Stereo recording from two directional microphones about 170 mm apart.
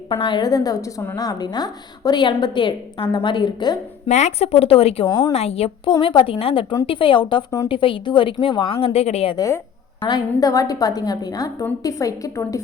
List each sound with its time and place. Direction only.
0.1 s a woman's voice: 25° left (ahead or behind)
4.1 s speech: 40° left (ahead or behind)
5.0 s a woman's voice: 25° left (ahead or behind)
5.3 s a woman's voice: 35° left (ahead or behind)
9.3 s a woman's voice: 20° left (ahead or behind)